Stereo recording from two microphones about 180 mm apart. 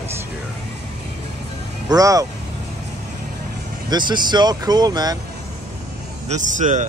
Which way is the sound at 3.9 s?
25° right (ahead or behind).